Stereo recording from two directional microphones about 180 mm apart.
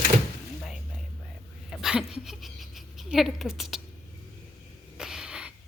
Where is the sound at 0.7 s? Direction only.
Centre (ahead or behind).